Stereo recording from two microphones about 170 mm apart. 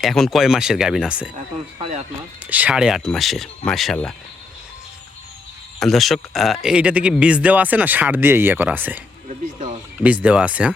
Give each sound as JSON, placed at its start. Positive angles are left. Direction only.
{"t": 0.0, "sound": "speech", "side_deg": 0}
{"t": 1.8, "sound": "speech", "side_deg": -40}
{"t": 2.5, "sound": "speech", "side_deg": -10}
{"t": 5.8, "sound": "speech", "side_deg": 0}
{"t": 10.0, "sound": "speech", "side_deg": -10}